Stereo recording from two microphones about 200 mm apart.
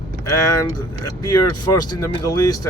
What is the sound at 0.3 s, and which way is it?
Speech, 15° left (ahead or behind).